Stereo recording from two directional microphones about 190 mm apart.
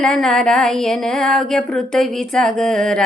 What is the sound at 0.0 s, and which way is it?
Speech, centre (ahead or behind).